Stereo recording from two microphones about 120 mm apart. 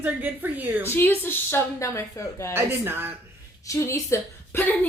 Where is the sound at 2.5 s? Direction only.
20° right (ahead or behind).